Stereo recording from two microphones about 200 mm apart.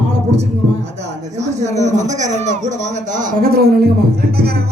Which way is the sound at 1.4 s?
35° right (ahead or behind).